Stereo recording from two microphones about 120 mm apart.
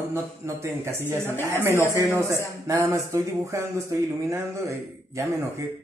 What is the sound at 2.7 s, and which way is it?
Speech, 25° right (ahead or behind).